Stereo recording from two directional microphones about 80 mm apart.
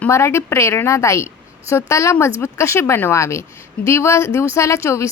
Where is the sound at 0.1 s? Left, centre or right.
Left.